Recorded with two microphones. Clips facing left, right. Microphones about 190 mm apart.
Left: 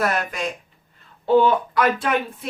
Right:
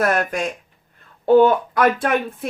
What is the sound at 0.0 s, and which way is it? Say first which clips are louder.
Speech: right 4 dB; 50° right (ahead or behind).